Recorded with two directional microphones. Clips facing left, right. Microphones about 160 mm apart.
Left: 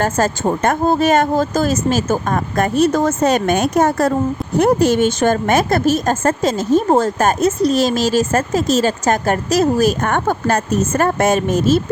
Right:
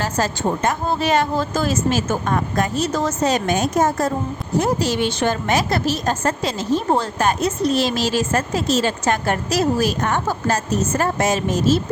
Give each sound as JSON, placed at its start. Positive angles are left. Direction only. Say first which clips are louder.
{"t": 0.0, "sound": "a woman's voice", "louder": "left 4 dB", "side_deg": 55}
{"t": 4.5, "sound": "a woman's voice", "louder": "left 6 dB", "side_deg": 55}